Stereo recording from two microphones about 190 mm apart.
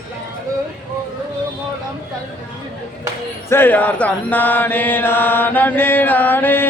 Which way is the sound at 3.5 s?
10° left (ahead or behind).